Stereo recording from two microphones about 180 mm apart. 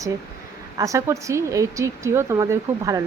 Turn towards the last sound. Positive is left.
turn(degrees=-20)  # may be behind; listen again after turning